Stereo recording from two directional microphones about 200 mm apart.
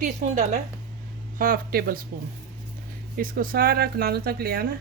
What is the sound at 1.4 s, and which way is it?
Speech, 45° right (ahead or behind).